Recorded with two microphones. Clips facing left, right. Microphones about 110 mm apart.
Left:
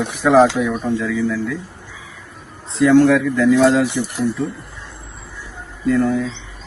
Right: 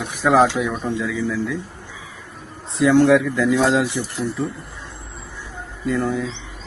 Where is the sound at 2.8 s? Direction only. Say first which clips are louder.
Left 3 dB; 20° right (ahead or behind).